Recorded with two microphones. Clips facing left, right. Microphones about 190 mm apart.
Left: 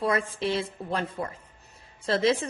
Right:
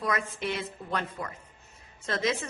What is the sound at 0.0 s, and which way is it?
A woman's voice, 30° left (ahead or behind).